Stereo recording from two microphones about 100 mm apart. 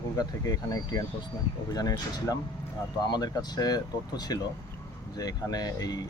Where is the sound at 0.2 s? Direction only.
40° left (ahead or behind).